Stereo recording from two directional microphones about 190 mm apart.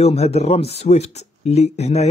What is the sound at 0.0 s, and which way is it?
Speech, 35° left (ahead or behind).